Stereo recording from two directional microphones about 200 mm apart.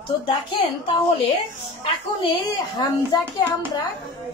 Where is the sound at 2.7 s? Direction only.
20° left (ahead or behind).